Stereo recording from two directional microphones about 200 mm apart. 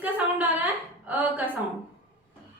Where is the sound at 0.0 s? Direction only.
5° right (ahead or behind).